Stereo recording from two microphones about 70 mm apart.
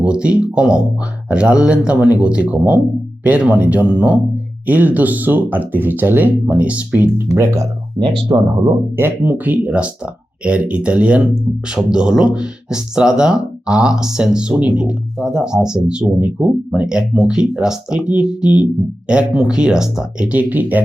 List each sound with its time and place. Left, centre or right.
0.0 s speech: centre
7.3 s speech: right
8.3 s speech: right
9.0 s speech: right